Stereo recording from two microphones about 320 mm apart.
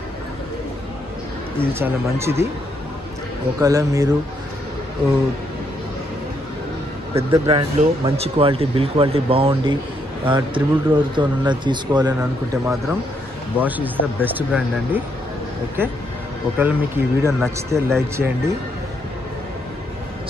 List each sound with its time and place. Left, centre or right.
1.6 s speech: centre
3.5 s speech: centre
7.2 s speech: centre
16.5 s speech: centre